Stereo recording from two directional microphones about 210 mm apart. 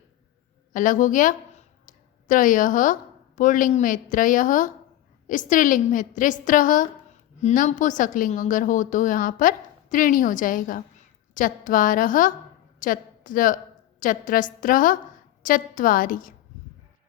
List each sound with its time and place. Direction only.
0.7 s a woman's voice: 40° left (ahead or behind)